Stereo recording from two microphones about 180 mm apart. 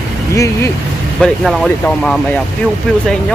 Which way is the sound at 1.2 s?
Centre (ahead or behind).